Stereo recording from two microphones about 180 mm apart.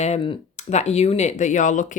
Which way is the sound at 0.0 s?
35° left (ahead or behind).